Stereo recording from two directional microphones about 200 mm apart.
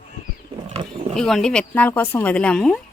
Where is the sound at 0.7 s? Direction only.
25° right (ahead or behind).